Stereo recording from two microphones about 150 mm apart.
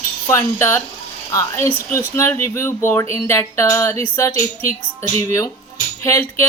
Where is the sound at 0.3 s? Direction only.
15° left (ahead or behind).